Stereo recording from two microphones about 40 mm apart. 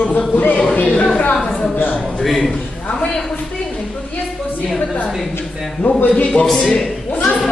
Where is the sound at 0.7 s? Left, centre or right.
Left.